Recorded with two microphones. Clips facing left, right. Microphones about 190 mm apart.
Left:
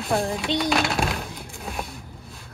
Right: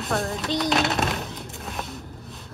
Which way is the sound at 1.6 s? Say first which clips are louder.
Left 2 dB; centre (ahead or behind).